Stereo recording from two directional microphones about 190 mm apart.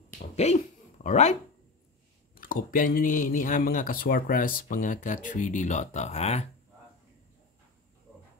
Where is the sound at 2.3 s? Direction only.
50° left (ahead or behind).